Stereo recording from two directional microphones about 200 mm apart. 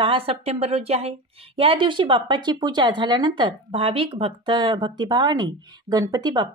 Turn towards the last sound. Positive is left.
turn(degrees=-20)  # may be behind; listen again after turning